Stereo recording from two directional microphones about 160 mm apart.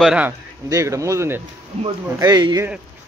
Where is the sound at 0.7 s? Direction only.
20° right (ahead or behind).